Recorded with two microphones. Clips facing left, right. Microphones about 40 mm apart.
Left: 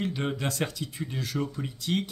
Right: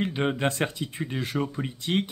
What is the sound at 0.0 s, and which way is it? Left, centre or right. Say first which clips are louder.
Speech: right 4 dB; right.